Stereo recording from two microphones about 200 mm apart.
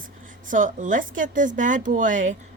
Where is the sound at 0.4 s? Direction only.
40° right (ahead or behind).